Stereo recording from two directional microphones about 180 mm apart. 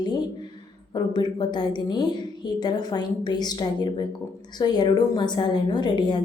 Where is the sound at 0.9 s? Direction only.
25° left (ahead or behind).